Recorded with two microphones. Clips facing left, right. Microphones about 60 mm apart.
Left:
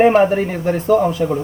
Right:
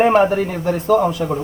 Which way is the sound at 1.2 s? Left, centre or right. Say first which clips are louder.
Left 3 dB; centre.